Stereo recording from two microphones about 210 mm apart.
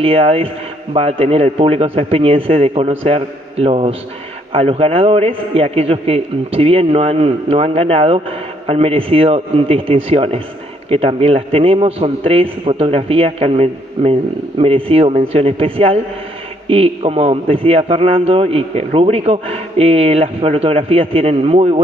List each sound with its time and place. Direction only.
0.0 s a man's voice: 30° right (ahead or behind)